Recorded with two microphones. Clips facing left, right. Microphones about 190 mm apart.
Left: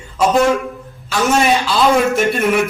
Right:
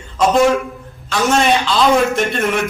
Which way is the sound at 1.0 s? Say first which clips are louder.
Even; 5° left (ahead or behind).